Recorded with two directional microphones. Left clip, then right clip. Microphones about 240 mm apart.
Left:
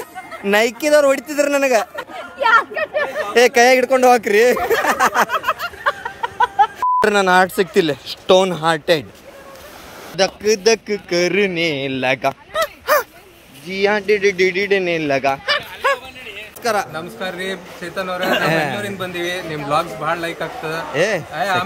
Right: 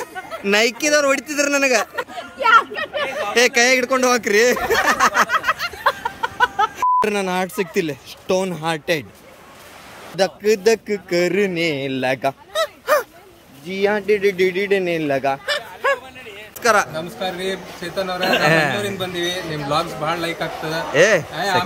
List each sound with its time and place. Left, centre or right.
0.5 s speech: centre
2.1 s speech: left
5.3 s a sound: left
5.9 s a sound: right
6.8 s speech: centre
10.1 s a man's voice: centre
12.9 s dog: centre
13.7 s speech: centre